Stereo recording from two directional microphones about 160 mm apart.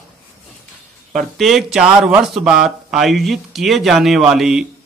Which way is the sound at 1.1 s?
Centre (ahead or behind).